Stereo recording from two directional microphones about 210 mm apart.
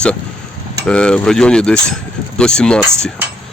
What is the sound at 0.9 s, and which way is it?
Speech, 5° left (ahead or behind).